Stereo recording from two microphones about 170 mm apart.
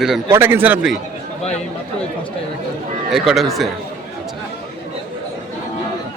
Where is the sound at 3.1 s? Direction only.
Centre (ahead or behind).